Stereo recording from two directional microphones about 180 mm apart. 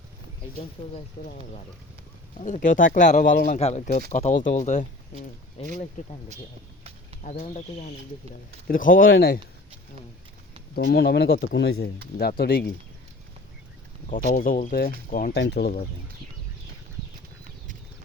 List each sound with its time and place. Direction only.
2.4 s speech: 45° left (ahead or behind)
7.2 s speech: 40° left (ahead or behind)
8.6 s speech: 50° left (ahead or behind)
10.8 s speech: 65° left (ahead or behind)
12.1 s speech: 55° left (ahead or behind)
14.1 s speech: 50° left (ahead or behind)
15.4 s speech: 65° left (ahead or behind)